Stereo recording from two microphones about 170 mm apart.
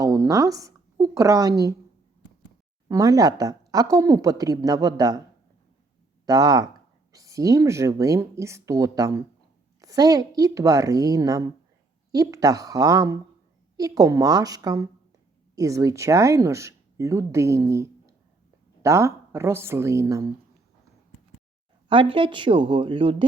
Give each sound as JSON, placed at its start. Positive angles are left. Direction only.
{"t": 0.0, "sound": "a sound", "side_deg": -20}
{"t": 1.1, "sound": "a woman's voice", "side_deg": -20}
{"t": 2.9, "sound": "a woman's voice", "side_deg": -20}
{"t": 6.2, "sound": "a woman's voice", "side_deg": -20}
{"t": 21.8, "sound": "a woman's voice", "side_deg": -30}